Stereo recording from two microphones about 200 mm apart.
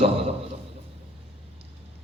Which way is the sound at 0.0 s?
30° right (ahead or behind).